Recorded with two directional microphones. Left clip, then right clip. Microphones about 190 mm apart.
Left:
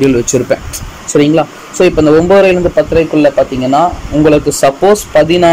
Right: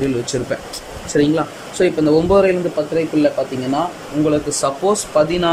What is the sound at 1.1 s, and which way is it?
Speech, 5° left (ahead or behind).